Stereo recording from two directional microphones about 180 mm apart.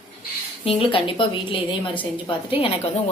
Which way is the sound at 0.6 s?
30° left (ahead or behind).